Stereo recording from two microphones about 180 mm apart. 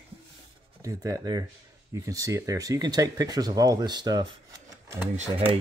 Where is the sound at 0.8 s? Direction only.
20° right (ahead or behind).